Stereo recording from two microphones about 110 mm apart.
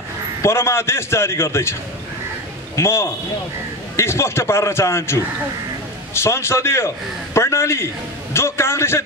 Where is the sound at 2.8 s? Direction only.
25° left (ahead or behind).